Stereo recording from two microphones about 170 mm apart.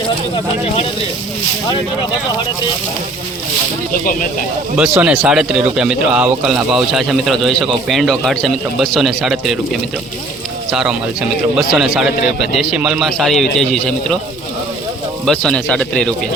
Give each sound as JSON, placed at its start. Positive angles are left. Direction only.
{"t": 4.0, "sound": "speech", "side_deg": 55}
{"t": 4.8, "sound": "speech", "side_deg": -5}
{"t": 10.7, "sound": "speech", "side_deg": -5}
{"t": 15.3, "sound": "speech", "side_deg": 5}